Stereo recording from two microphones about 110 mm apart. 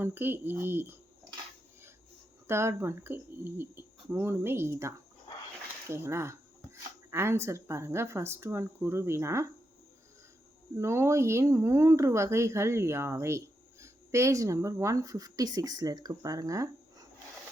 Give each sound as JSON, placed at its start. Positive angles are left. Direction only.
{"t": 0.0, "sound": "speech", "side_deg": -20}
{"t": 2.5, "sound": "speech", "side_deg": -25}
{"t": 10.8, "sound": "speech", "side_deg": -25}